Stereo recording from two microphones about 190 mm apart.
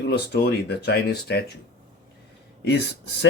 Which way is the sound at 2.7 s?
65° left (ahead or behind).